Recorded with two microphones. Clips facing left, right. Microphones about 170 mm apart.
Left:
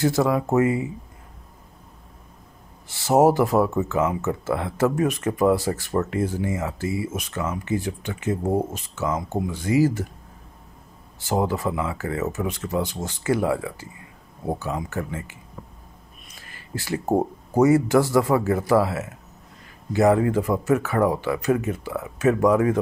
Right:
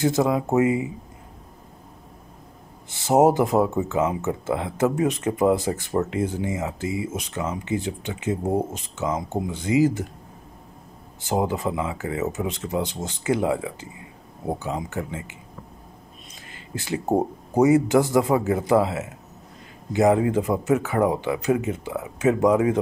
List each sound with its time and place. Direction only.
0.0 s speech: 20° right (ahead or behind)
2.9 s speech: 20° right (ahead or behind)
11.1 s speech: 20° right (ahead or behind)
16.4 s a sound: 20° right (ahead or behind)
17.2 s speech: 20° right (ahead or behind)